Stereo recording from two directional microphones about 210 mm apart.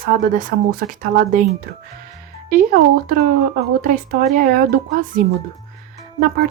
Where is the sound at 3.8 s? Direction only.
40° right (ahead or behind).